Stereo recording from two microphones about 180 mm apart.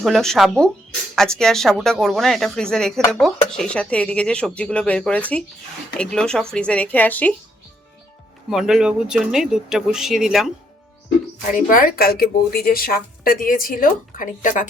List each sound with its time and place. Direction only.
0.0 s a woman's voice: centre (ahead or behind)
8.4 s speech: 5° right (ahead or behind)
11.5 s speech: 50° left (ahead or behind)